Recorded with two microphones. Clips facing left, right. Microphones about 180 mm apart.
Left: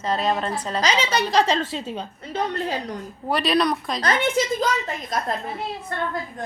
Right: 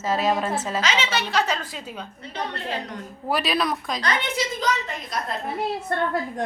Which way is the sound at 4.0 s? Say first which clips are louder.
Left 7 dB; 50° left (ahead or behind).